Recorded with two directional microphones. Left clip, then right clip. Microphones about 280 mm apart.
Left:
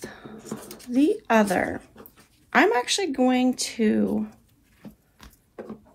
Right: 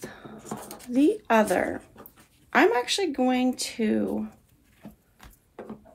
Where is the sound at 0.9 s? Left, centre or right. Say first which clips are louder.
Left 1 dB; left.